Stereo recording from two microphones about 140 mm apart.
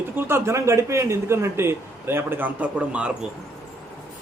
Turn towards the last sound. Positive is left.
turn(degrees=-10)  # may be behind; listen again after turning